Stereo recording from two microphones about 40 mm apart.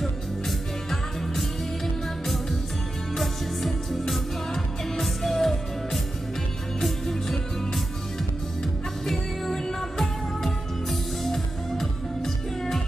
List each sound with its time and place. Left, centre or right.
3.2 s music: centre
9.0 s music: centre